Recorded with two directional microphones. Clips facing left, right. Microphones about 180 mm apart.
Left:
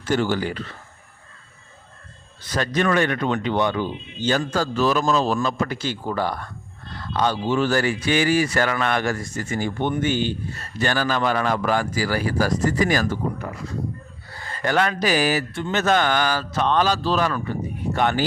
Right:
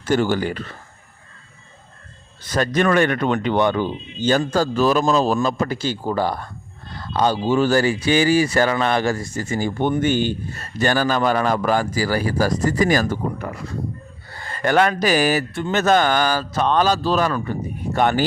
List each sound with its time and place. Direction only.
0.0 s speech: 45° right (ahead or behind)
2.5 s speech: 50° right (ahead or behind)
14.6 s speech: 50° right (ahead or behind)